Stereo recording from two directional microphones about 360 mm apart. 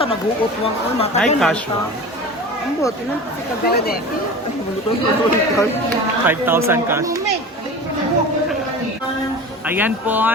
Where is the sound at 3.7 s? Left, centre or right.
Left.